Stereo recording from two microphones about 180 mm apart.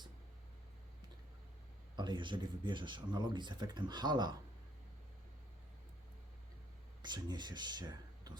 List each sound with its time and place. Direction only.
2.0 s speech: 25° right (ahead or behind)
7.0 s speech: 25° right (ahead or behind)